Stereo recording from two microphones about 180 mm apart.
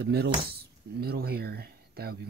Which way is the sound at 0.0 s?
65° right (ahead or behind).